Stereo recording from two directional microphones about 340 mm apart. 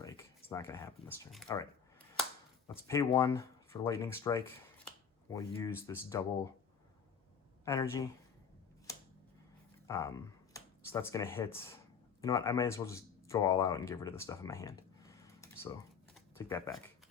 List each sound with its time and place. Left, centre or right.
0.0 s speech: centre
2.8 s speech: centre
7.6 s speech: centre
9.8 s speech: centre